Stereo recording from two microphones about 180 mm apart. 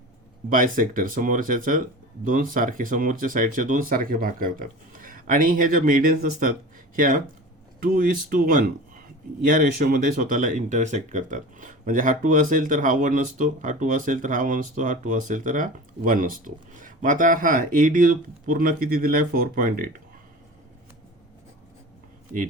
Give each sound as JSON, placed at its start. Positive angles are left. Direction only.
{"t": 0.5, "sound": "speech", "side_deg": -50}